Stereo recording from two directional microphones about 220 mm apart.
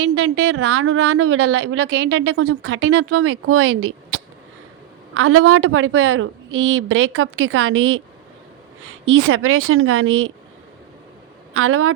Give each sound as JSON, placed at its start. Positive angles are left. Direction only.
{"t": 0.0, "sound": "a woman's voice", "side_deg": -90}
{"t": 1.5, "sound": "a woman's voice", "side_deg": -55}
{"t": 2.0, "sound": "a woman's voice", "side_deg": -80}
{"t": 2.6, "sound": "a woman's voice", "side_deg": -55}
{"t": 2.9, "sound": "a woman's voice", "side_deg": -85}
{"t": 5.1, "sound": "a woman's voice", "side_deg": -70}
{"t": 11.5, "sound": "speech", "side_deg": -70}